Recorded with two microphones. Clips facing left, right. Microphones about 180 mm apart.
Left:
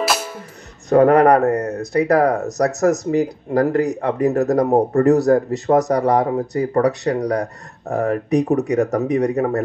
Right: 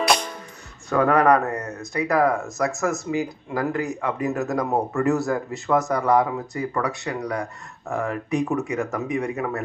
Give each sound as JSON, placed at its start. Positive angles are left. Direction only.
{"t": 0.0, "sound": "music", "side_deg": 5}
{"t": 0.8, "sound": "speech", "side_deg": 40}